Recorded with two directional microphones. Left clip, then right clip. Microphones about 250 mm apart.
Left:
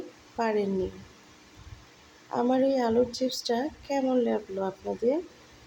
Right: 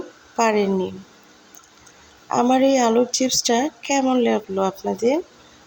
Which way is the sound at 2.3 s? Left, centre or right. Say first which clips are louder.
Right 8 dB; centre.